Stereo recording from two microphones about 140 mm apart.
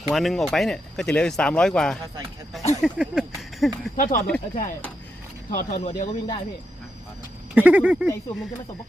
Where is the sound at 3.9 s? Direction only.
70° left (ahead or behind).